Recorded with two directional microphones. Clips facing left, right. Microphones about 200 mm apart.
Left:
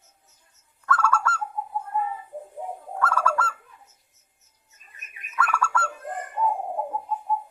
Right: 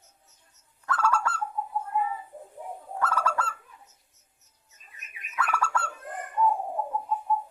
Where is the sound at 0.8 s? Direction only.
15° right (ahead or behind).